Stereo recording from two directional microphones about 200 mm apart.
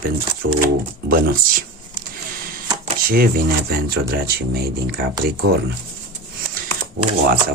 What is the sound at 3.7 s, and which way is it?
Speech, 50° right (ahead or behind).